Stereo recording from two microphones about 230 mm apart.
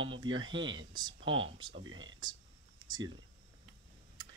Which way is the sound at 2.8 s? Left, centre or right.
Centre.